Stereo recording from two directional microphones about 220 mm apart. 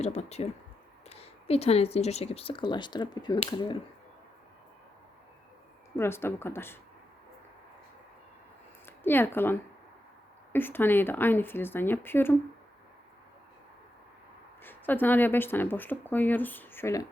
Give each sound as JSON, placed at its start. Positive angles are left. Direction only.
{"t": 0.0, "sound": "speech", "side_deg": 30}
{"t": 6.0, "sound": "speech", "side_deg": 10}
{"t": 8.9, "sound": "speech", "side_deg": 10}
{"t": 14.6, "sound": "speech", "side_deg": 10}